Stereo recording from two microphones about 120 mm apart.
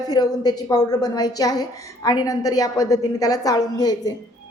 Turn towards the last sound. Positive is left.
turn(degrees=35)  # may be behind; listen again after turning